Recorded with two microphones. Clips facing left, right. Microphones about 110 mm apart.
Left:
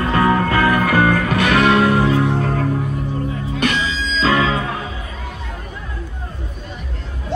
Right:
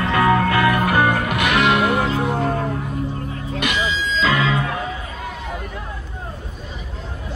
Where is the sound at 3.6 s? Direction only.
35° left (ahead or behind).